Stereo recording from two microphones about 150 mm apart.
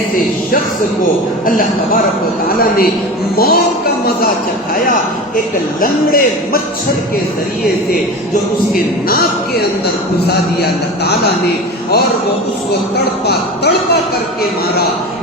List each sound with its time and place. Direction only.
1.5 s a man's voice: 70° left (ahead or behind)
2.6 s a man's voice: 90° left
5.8 s a man's voice: 75° left (ahead or behind)
8.7 s a man's voice: 90° left
13.2 s a man's voice: 90° left